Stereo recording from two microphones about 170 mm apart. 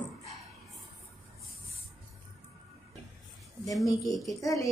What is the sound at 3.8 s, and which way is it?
Speech, 20° left (ahead or behind).